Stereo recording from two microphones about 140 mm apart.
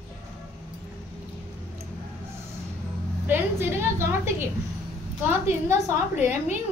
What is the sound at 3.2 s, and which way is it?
A woman's voice, 15° right (ahead or behind).